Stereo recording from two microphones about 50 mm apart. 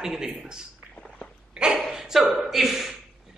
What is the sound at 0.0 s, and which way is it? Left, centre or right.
Speech, centre.